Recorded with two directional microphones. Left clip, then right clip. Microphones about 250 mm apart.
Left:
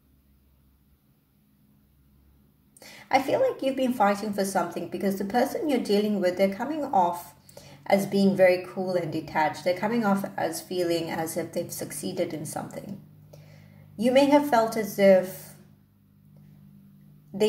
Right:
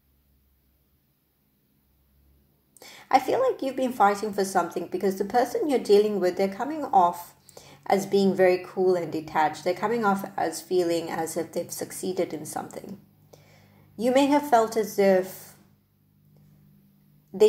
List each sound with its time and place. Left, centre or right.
2.8 s a woman's voice: centre
13.9 s a woman's voice: centre